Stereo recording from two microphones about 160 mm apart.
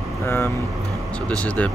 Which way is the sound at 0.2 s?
15° left (ahead or behind).